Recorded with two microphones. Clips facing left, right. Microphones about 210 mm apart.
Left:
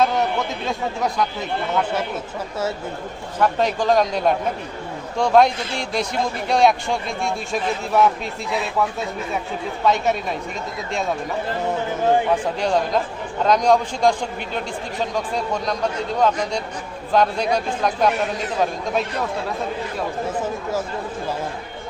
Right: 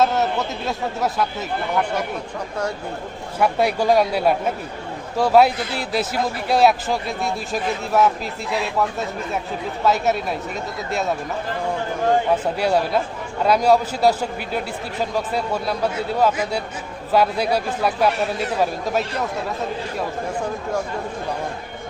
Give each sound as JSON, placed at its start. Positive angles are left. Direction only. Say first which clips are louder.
{"t": 0.6, "sound": "a man's voice", "louder": "even", "side_deg": -5}
{"t": 3.3, "sound": "a man's voice", "louder": "right 1 dB", "side_deg": -10}
{"t": 12.5, "sound": "a man's voice", "louder": "right 1 dB", "side_deg": -10}